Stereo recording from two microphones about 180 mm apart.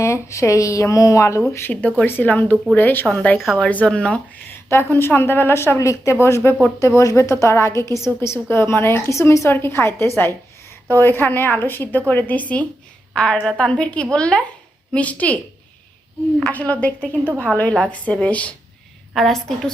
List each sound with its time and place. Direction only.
0.0 s a woman's voice: 15° left (ahead or behind)
16.4 s a woman's voice: 10° left (ahead or behind)